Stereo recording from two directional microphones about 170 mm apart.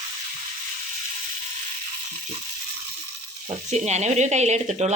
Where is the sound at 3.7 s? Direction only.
40° right (ahead or behind).